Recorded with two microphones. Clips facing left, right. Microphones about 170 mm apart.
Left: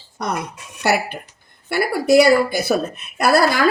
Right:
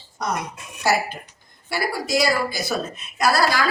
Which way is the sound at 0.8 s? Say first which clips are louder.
Left 2 dB; 65° left (ahead or behind).